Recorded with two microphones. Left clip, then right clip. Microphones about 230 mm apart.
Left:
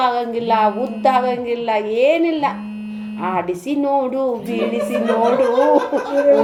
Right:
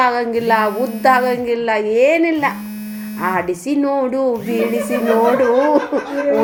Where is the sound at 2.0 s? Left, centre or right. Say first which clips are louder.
Right 2 dB; right.